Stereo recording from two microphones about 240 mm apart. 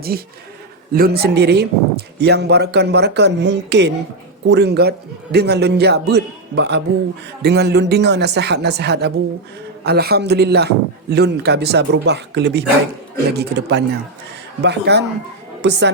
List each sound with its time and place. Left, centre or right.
0.1 s speech: right